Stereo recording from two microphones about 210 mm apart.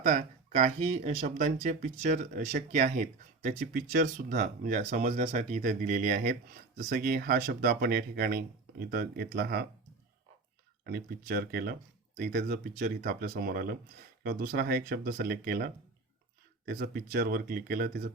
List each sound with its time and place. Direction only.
0.0 s speech: 40° right (ahead or behind)
10.8 s speech: 45° right (ahead or behind)